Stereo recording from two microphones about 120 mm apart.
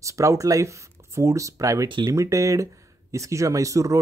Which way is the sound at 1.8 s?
40° right (ahead or behind).